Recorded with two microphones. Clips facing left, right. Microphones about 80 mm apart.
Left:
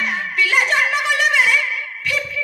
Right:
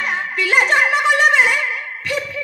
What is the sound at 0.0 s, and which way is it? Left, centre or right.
Music, right.